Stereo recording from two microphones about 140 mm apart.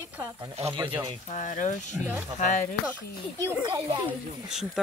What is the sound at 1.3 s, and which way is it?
Speech, 60° left (ahead or behind).